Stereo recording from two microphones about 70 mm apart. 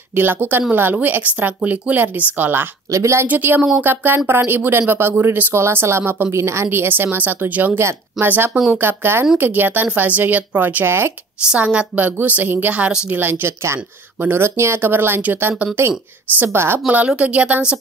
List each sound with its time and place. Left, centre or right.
0.1 s speech: right
2.9 s a woman's voice: right
3.3 s a woman's voice: right
11.4 s speech: centre
13.2 s a woman's voice: right
16.8 s speech: centre